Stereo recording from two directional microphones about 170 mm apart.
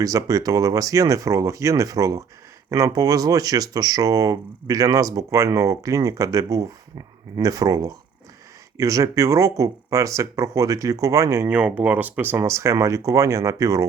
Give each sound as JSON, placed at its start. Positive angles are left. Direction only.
{"t": 0.0, "sound": "speech", "side_deg": -20}